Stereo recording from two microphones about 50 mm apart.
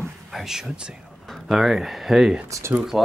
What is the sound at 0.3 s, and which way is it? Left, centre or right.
Speech, centre.